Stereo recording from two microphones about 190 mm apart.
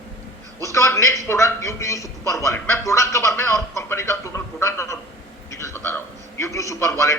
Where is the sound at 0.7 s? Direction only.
15° left (ahead or behind).